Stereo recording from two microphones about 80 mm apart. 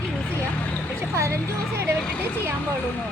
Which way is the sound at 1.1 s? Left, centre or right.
Right.